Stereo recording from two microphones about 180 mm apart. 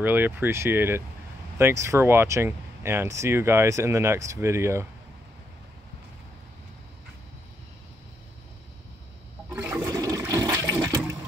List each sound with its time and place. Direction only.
0.0 s speech: 10° right (ahead or behind)
9.5 s toilet flush: 10° right (ahead or behind)